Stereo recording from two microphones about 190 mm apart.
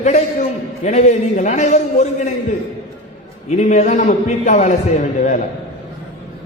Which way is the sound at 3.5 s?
40° left (ahead or behind).